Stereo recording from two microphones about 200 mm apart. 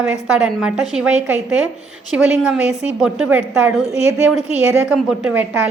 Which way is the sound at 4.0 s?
30° left (ahead or behind).